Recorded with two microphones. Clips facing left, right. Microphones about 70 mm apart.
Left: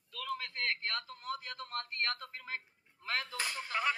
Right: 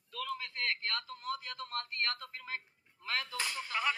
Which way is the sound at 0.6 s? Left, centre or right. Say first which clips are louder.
Right 2 dB; left.